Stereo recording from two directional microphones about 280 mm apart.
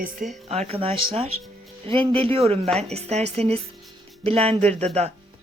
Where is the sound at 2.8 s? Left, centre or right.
Right.